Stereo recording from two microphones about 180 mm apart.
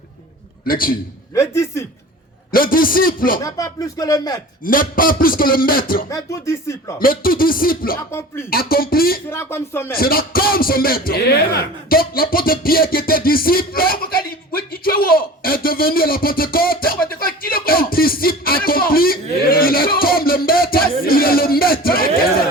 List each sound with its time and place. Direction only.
0.6 s a man's voice: 50° left (ahead or behind)
1.3 s a sound: 15° left (ahead or behind)
2.5 s speech: 55° left (ahead or behind)
3.4 s speech: 20° left (ahead or behind)
4.6 s speech: 50° left (ahead or behind)
6.1 s speech: 15° left (ahead or behind)
7.0 s speech: 55° left (ahead or behind)
9.3 s speech: 15° left (ahead or behind)
9.9 s speech: 55° left (ahead or behind)